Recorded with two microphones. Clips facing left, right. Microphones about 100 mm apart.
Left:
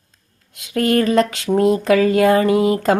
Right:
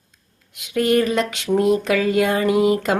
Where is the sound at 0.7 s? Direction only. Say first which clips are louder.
Left 2 dB; 35° left (ahead or behind).